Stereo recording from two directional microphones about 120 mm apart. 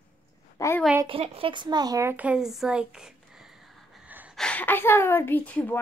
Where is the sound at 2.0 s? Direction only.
10° right (ahead or behind).